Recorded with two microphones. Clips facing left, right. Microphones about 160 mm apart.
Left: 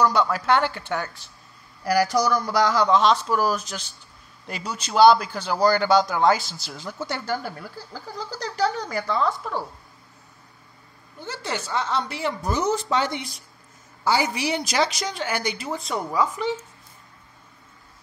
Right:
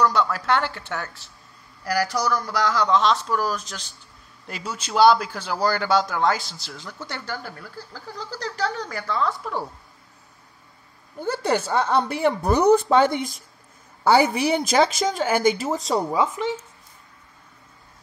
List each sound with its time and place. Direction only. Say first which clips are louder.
0.0 s speech: left 1 dB; centre (ahead or behind)
1.9 s speech: left 3 dB; 15° left (ahead or behind)
4.5 s speech: even; 5° right (ahead or behind)
11.1 s a woman's voice: right 8 dB; 50° right (ahead or behind)
16.1 s speech: right 1 dB; 25° right (ahead or behind)